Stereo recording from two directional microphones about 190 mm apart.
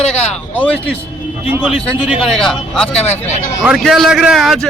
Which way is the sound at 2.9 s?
35° left (ahead or behind).